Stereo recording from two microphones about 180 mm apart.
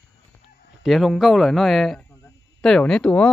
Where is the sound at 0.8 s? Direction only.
Centre (ahead or behind).